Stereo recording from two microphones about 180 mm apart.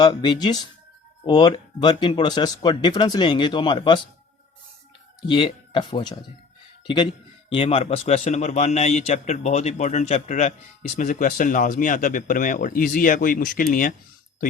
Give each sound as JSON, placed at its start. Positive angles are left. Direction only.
{"t": 0.0, "sound": "speech", "side_deg": 25}
{"t": 5.2, "sound": "a man's voice", "side_deg": 25}